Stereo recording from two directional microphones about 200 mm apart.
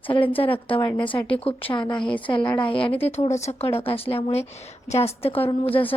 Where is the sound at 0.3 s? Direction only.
25° left (ahead or behind).